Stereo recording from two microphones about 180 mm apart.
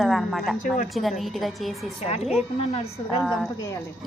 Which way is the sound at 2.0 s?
35° left (ahead or behind).